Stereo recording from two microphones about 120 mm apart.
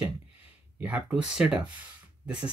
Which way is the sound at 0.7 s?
10° right (ahead or behind).